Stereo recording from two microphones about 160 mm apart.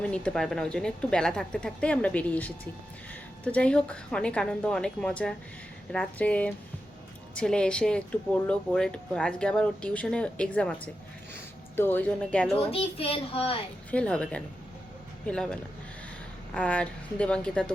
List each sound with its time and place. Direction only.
0.0 s a woman's voice: 5° left (ahead or behind)
11.8 s speech: 10° left (ahead or behind)
12.7 s a child's voice: 35° left (ahead or behind)
13.9 s a woman's voice: 5° left (ahead or behind)
16.6 s speech: 10° left (ahead or behind)